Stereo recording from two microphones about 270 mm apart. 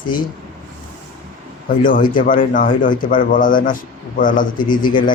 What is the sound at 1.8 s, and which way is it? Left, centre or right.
A man's voice, left.